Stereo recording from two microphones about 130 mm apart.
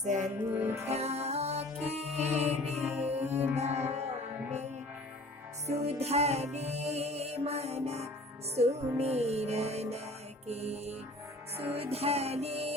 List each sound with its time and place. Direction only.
0.0 s music: 65° right (ahead or behind)
0.5 s music: 20° right (ahead or behind)
0.9 s music: 55° right (ahead or behind)
5.6 s music: 55° right (ahead or behind)